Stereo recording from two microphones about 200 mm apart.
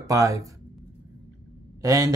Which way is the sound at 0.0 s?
15° right (ahead or behind).